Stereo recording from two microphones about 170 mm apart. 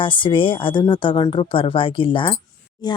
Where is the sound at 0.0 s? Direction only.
30° left (ahead or behind).